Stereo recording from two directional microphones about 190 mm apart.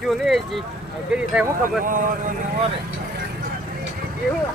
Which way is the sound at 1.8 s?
45° right (ahead or behind).